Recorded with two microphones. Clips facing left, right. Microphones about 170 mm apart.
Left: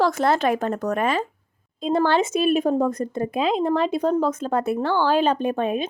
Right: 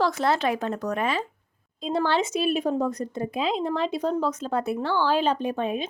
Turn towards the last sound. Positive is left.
turn(degrees=55)  # may be behind; listen again after turning